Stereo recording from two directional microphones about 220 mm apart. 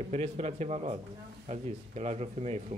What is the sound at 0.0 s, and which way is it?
A man's voice, 30° right (ahead or behind).